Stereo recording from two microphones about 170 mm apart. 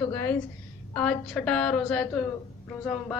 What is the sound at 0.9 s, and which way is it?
A woman's voice, 5° left (ahead or behind).